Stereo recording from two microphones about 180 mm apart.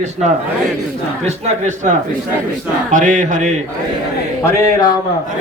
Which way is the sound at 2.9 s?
45° right (ahead or behind).